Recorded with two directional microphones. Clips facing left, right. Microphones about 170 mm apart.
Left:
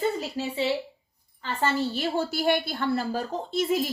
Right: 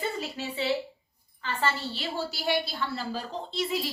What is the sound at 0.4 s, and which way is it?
Speech, 35° left (ahead or behind).